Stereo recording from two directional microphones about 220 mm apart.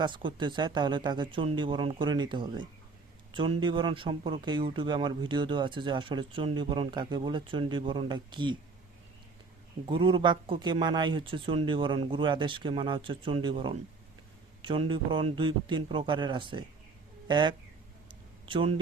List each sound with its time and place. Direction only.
0.0 s speech: 20° right (ahead or behind)
9.9 s speech: 20° right (ahead or behind)